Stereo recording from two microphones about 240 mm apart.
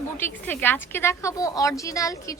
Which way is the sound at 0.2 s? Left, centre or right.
Centre.